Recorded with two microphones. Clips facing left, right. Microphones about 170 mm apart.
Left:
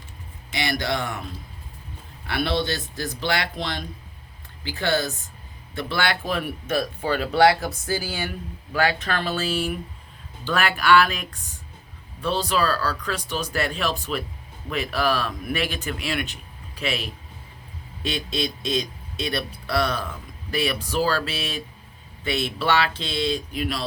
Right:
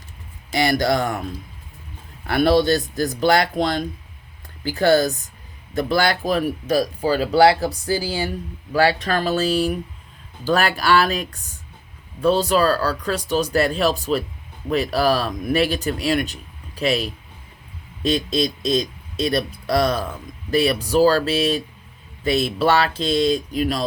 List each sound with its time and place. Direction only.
0.5 s speech: 45° right (ahead or behind)
2.2 s speech: 45° right (ahead or behind)